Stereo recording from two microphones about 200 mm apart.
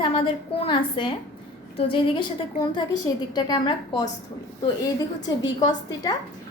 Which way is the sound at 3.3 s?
20° left (ahead or behind).